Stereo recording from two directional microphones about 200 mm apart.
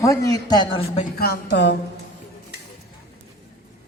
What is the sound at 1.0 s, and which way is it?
Speech, 50° left (ahead or behind).